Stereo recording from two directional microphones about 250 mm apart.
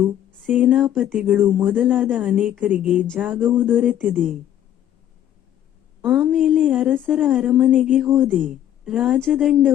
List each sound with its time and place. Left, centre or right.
0.3 s speech: centre
6.0 s speech: centre